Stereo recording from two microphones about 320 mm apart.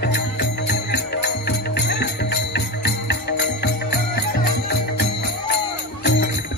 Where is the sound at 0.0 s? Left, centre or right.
Left.